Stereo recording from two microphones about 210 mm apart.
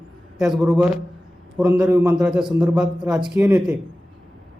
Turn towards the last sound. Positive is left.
turn(degrees=-5)  # may be behind; listen again after turning